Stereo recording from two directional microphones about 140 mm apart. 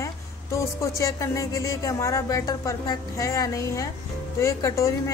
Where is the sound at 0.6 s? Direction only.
20° left (ahead or behind).